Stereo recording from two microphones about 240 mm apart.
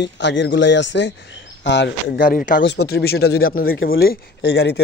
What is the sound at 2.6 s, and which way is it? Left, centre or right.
Speech, left.